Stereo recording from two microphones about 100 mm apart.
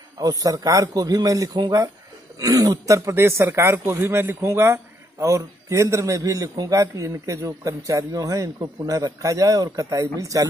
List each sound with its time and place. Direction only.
0.2 s a man's voice: 35° right (ahead or behind)